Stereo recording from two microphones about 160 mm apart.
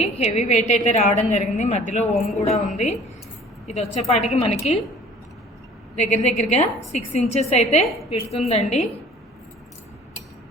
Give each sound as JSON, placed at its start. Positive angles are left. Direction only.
{"t": 0.0, "sound": "a woman's voice", "side_deg": 40}
{"t": 6.0, "sound": "a woman's voice", "side_deg": 45}